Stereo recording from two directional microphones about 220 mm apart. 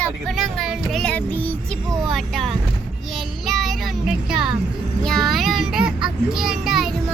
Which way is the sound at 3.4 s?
Centre (ahead or behind).